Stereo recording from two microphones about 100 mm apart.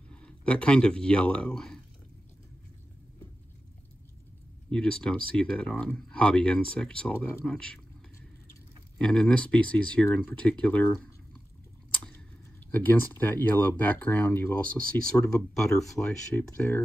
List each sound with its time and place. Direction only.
0.1 s speech: 10° left (ahead or behind)
4.6 s speech: 10° left (ahead or behind)
8.9 s speech: 10° left (ahead or behind)
12.7 s speech: 20° left (ahead or behind)